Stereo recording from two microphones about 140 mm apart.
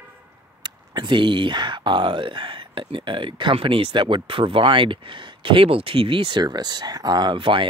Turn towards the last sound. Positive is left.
turn(degrees=-35)  # may be behind; listen again after turning